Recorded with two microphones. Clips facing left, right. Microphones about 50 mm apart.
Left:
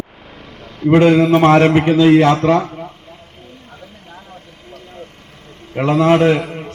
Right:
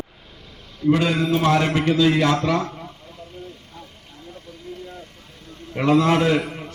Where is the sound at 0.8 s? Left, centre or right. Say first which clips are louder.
Left 9 dB; left.